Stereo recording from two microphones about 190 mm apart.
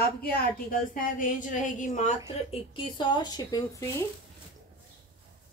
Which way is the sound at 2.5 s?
25° left (ahead or behind).